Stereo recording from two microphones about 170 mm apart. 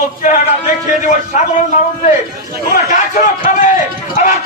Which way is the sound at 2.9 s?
50° left (ahead or behind).